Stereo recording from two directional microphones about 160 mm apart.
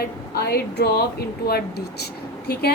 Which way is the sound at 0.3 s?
85° left.